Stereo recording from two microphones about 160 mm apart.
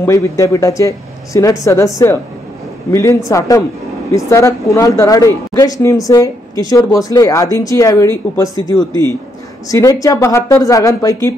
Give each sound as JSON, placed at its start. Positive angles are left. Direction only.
{"t": 0.0, "sound": "speech", "side_deg": 20}
{"t": 2.9, "sound": "speech", "side_deg": 20}